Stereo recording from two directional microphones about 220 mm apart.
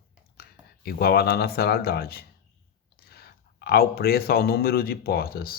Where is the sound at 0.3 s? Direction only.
45° left (ahead or behind).